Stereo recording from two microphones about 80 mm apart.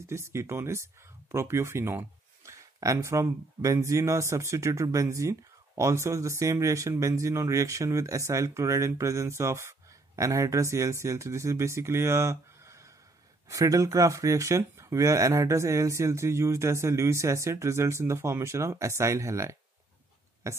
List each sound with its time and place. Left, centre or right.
0.0 s speech: right